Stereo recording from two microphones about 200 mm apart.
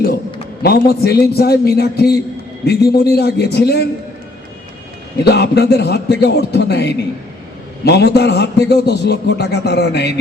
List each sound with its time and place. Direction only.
0.6 s a man's voice: 50° left (ahead or behind)
5.2 s a man's voice: 55° left (ahead or behind)